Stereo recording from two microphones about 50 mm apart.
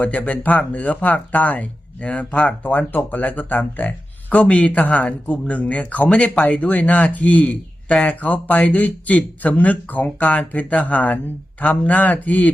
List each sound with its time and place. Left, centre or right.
0.0 s speech: left